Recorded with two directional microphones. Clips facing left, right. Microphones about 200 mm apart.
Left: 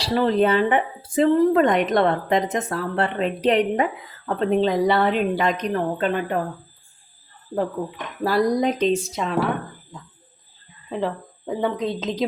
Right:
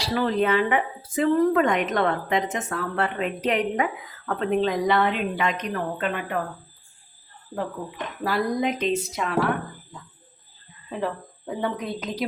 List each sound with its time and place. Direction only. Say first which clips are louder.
0.0 s speech: left 4 dB; 30° left (ahead or behind)
8.2 s speech: left 5 dB; 35° left (ahead or behind)
11.0 s speech: left 2 dB; 20° left (ahead or behind)